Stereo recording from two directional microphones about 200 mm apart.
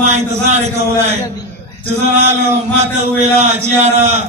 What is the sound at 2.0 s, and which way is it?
A man's voice, 35° right (ahead or behind).